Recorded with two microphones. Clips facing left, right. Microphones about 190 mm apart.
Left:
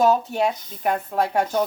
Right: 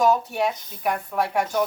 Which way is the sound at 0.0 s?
25° left (ahead or behind).